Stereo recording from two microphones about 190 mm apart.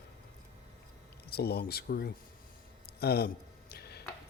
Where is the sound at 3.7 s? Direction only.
55° left (ahead or behind).